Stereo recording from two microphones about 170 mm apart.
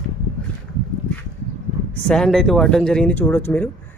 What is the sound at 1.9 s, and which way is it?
Speech, 5° left (ahead or behind).